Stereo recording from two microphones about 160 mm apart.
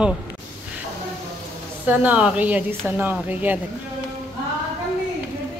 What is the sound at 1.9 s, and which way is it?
Speech, 10° right (ahead or behind).